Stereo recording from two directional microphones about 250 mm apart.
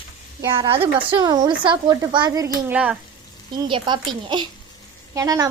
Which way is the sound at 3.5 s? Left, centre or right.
Centre.